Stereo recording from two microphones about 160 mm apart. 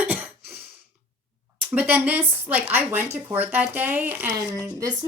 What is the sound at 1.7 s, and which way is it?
Speech, 10° right (ahead or behind).